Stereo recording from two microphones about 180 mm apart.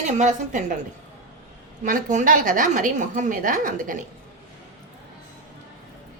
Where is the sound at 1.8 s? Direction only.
45° right (ahead or behind).